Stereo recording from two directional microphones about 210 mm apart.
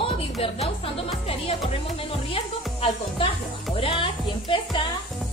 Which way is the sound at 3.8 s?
25° left (ahead or behind).